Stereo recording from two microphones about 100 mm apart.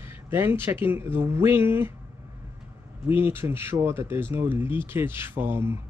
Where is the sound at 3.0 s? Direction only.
20° right (ahead or behind).